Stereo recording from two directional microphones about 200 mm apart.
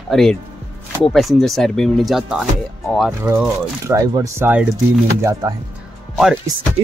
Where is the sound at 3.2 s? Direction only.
15° right (ahead or behind).